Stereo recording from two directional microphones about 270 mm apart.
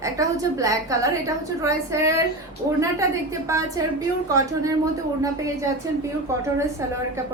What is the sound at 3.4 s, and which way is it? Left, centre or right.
A woman's voice, centre.